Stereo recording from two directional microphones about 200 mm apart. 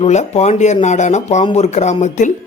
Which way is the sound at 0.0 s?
35° left (ahead or behind).